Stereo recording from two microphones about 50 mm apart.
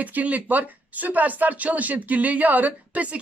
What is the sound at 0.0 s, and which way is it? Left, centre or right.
Speech, right.